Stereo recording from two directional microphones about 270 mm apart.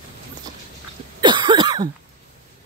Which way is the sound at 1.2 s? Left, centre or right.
Centre.